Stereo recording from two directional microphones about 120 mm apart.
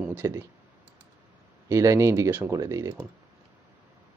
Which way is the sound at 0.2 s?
25° right (ahead or behind).